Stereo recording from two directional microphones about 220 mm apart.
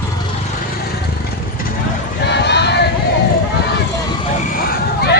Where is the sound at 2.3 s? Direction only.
50° left (ahead or behind).